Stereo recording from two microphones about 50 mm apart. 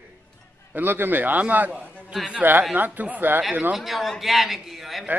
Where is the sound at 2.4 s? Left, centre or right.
Right.